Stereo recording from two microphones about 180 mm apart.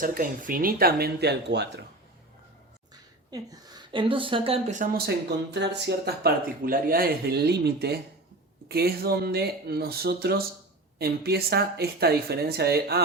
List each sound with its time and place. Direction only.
0.0 s speech: 50° right (ahead or behind); by 1.8 s 70° right (ahead or behind)
2.9 s a woman's voice: 20° right (ahead or behind)
4.8 s speech: 65° right (ahead or behind)